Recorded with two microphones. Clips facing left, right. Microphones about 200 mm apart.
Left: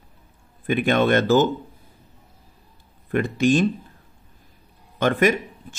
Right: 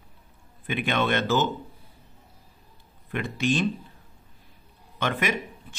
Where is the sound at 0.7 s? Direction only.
45° left (ahead or behind).